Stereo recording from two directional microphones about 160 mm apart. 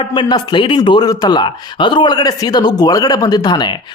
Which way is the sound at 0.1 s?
30° left (ahead or behind).